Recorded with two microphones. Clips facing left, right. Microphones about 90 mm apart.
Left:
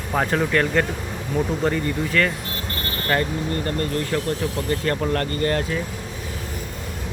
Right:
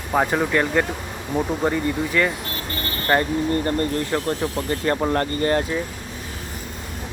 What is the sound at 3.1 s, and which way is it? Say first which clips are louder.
Speech: right 4 dB; 25° right (ahead or behind).